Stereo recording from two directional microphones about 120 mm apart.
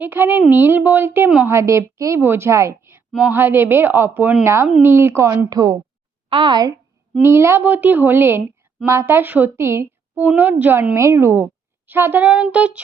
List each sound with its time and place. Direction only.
0.0 s a woman's voice: 15° right (ahead or behind)
0.5 s a sound: 15° right (ahead or behind)
1.5 s a woman's voice: 25° right (ahead or behind)
6.2 s a woman's voice: 45° right (ahead or behind)
7.2 s a woman's voice: 20° right (ahead or behind)
11.9 s a sound: 20° right (ahead or behind)